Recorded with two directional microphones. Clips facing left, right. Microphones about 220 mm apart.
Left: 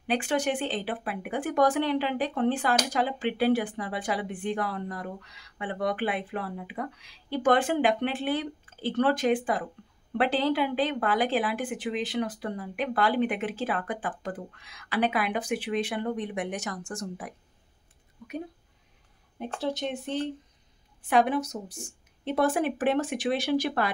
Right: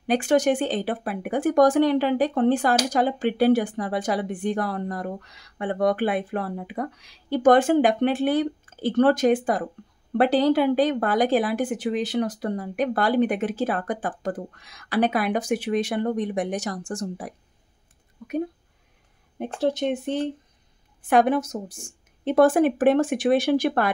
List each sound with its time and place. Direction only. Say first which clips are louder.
0.0 s speech: right 7 dB; 45° right (ahead or behind)
19.6 s speech: right 8 dB; 50° right (ahead or behind)